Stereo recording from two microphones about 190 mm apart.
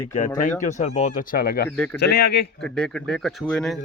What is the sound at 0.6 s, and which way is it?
Speech, 35° left (ahead or behind).